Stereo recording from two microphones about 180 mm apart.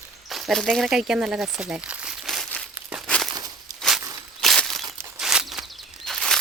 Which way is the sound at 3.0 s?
5° left (ahead or behind).